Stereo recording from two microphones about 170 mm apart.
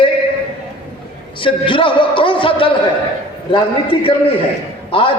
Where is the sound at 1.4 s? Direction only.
30° left (ahead or behind).